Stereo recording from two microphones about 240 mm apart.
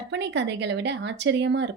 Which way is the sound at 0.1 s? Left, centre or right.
Right.